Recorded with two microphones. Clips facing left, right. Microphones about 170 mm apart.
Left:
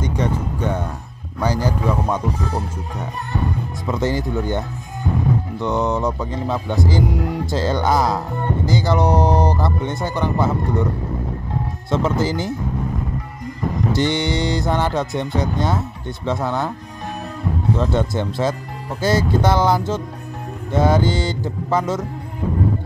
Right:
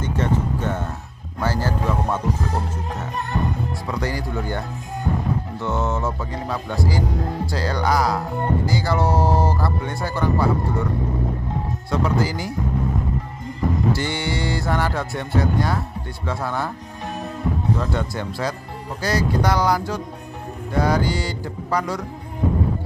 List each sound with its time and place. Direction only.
0.0 s speech: 15° left (ahead or behind)
3.9 s speech: 20° left (ahead or behind)
7.5 s speech: 25° left (ahead or behind)
11.9 s speech: 25° left (ahead or behind)
13.9 s speech: 20° left (ahead or behind)
17.7 s speech: 25° left (ahead or behind)